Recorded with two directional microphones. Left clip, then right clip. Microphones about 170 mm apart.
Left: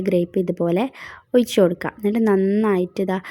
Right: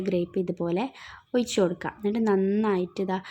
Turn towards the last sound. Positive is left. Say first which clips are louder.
# left 6 dB
turn(degrees=30)  # may be behind; listen again after turning